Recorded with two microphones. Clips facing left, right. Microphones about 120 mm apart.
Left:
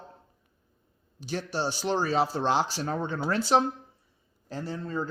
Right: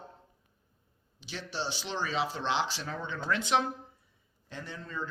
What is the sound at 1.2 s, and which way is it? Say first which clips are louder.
A man's voice: left 7 dB; 45° left (ahead or behind).